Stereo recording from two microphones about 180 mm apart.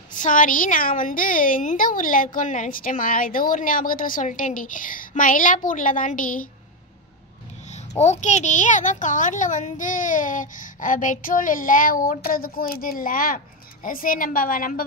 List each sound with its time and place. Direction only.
0.1 s a woman's voice: 45° left (ahead or behind)
8.0 s a woman's voice: 40° left (ahead or behind)